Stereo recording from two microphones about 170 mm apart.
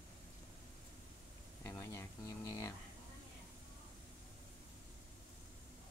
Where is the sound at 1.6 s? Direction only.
15° left (ahead or behind).